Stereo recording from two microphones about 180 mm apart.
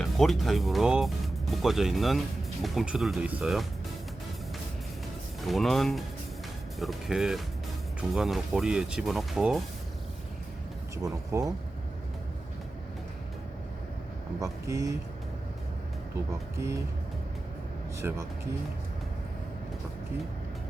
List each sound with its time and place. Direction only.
0.0 s speech: centre (ahead or behind)
5.5 s speech: centre (ahead or behind)
10.9 s speech: 15° right (ahead or behind)
14.3 s speech: 20° right (ahead or behind)
16.6 s speech: 15° right (ahead or behind)